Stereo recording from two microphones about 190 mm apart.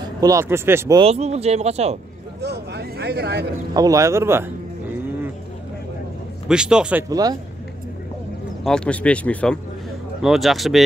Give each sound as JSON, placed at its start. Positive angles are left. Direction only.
{"t": 0.0, "sound": "speech", "side_deg": -20}
{"t": 0.9, "sound": "speech", "side_deg": -35}
{"t": 2.4, "sound": "a sound", "side_deg": -60}
{"t": 3.7, "sound": "speech", "side_deg": -20}
{"t": 6.4, "sound": "speech", "side_deg": -5}
{"t": 7.1, "sound": "speech", "side_deg": -20}
{"t": 8.6, "sound": "speech", "side_deg": 5}